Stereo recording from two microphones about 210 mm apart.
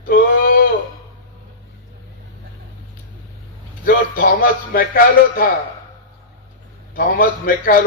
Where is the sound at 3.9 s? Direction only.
45° left (ahead or behind).